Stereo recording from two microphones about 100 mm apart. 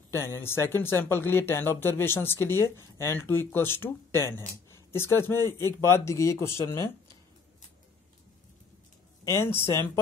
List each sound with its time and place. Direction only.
0.1 s speech: 25° left (ahead or behind)
9.2 s speech: 25° left (ahead or behind)